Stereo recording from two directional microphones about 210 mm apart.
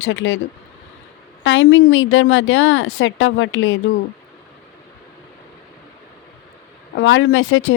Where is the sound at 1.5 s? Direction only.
65° left (ahead or behind).